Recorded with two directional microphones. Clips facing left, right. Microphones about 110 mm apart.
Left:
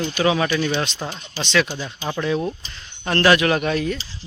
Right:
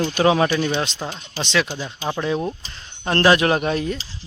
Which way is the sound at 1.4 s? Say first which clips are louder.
Left 1 dB; 25° right (ahead or behind).